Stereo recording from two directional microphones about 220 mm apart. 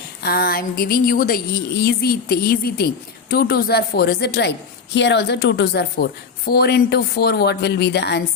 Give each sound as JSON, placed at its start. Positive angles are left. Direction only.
{"t": 0.2, "sound": "a woman's voice", "side_deg": 45}